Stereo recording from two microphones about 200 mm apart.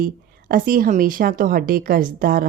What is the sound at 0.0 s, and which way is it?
Speech, 45° right (ahead or behind).